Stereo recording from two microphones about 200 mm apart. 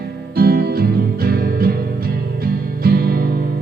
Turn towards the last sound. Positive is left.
turn(degrees=-50)  # may be behind; listen again after turning